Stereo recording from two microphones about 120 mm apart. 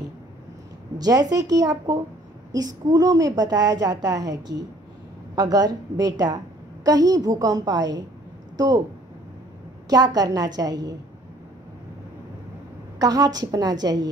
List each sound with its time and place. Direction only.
0.9 s a woman's voice: 30° right (ahead or behind)
9.8 s a woman's voice: 35° right (ahead or behind)
13.0 s a woman's voice: 30° right (ahead or behind)